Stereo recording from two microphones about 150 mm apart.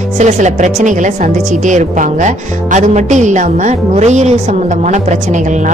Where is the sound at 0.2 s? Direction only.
50° right (ahead or behind).